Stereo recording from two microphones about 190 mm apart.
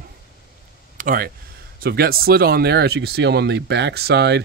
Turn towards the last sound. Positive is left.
turn(degrees=-60)  # may be behind; listen again after turning